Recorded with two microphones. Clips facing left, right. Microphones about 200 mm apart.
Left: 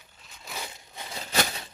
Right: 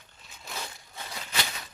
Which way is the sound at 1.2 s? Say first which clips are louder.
Left 7 dB; 40° left (ahead or behind).